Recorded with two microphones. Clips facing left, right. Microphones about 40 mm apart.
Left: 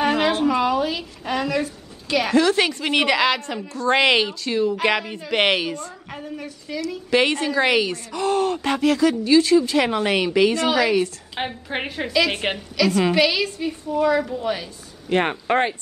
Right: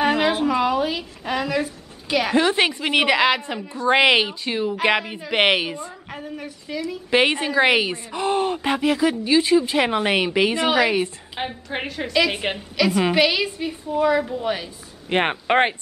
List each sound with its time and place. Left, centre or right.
0.0 s a sound: centre
2.3 s a woman's voice: right
6.0 s a woman's voice: centre
7.1 s speech: right
11.3 s a woman's voice: centre
12.5 s a woman's voice: centre
15.0 s speech: right